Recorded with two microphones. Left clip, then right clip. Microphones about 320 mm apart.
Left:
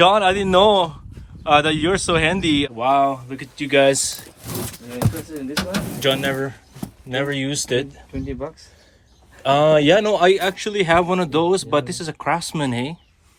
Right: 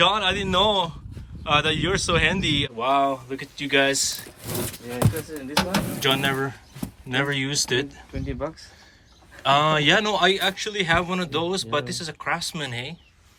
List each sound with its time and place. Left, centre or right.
0.0 s a man's voice: centre
6.0 s a man's voice: centre
8.1 s speech: right
9.4 s a man's voice: centre